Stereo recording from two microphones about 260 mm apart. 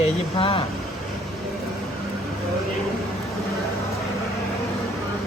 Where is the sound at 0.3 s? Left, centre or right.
Left.